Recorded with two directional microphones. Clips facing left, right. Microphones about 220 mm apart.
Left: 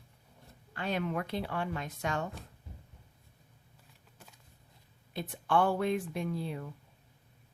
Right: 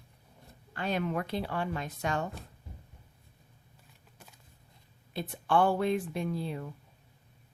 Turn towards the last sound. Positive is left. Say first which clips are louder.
# right 2 dB
turn(degrees=-30)  # may be behind; listen again after turning